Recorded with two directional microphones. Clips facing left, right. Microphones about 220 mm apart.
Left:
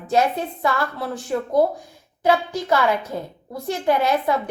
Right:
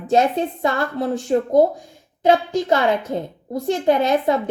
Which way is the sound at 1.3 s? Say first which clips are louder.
Right 3 dB; 25° right (ahead or behind).